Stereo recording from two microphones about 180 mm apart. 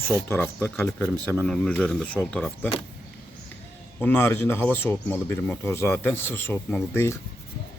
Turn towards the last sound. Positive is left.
turn(degrees=15)  # may be behind; listen again after turning